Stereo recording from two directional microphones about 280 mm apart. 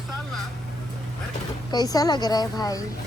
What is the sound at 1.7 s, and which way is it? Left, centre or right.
Speech, centre.